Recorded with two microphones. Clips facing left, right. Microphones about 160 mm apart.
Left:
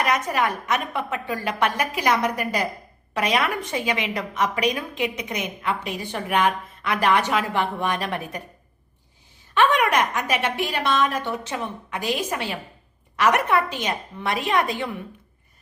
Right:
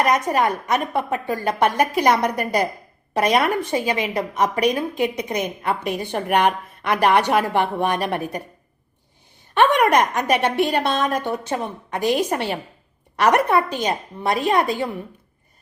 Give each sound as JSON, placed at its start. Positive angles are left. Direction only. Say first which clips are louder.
{"t": 0.0, "sound": "a woman's voice", "louder": "right 4 dB", "side_deg": -35}
{"t": 5.6, "sound": "a woman's voice", "louder": "right 4 dB", "side_deg": -50}
{"t": 9.6, "sound": "a woman's voice", "louder": "right 4 dB", "side_deg": -50}
{"t": 10.2, "sound": "a woman's voice", "louder": "right 6 dB", "side_deg": -60}
{"t": 12.0, "sound": "a woman's voice", "louder": "right 6 dB", "side_deg": -55}
{"t": 13.2, "sound": "a woman's voice", "louder": "right 3 dB", "side_deg": -35}